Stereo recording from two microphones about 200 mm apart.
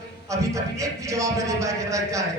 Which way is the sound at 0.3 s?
15° right (ahead or behind).